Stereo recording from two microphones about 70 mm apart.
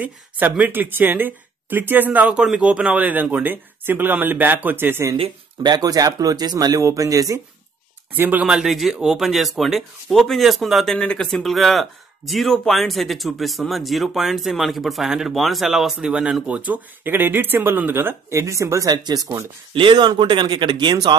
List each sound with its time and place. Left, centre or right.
0.0 s speech: right
5.6 s speech: right
6.8 s speech: right
8.1 s speech: right
8.5 s speech: centre
11.0 s speech: centre; by 18.9 s right
20.0 s speech: right